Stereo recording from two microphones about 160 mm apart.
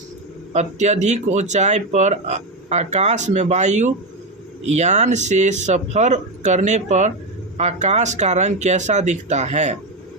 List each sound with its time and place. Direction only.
0.5 s speech: 45° right (ahead or behind)